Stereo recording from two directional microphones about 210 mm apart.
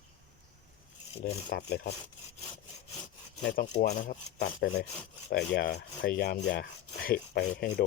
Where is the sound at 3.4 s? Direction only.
45° left (ahead or behind).